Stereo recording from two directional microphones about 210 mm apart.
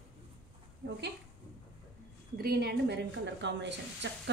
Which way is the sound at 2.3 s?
50° right (ahead or behind).